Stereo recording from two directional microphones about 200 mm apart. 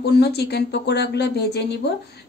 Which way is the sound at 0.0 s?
55° left (ahead or behind).